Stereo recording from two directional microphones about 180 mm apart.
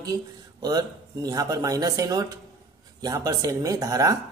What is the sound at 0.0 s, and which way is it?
A woman's voice, 20° right (ahead or behind).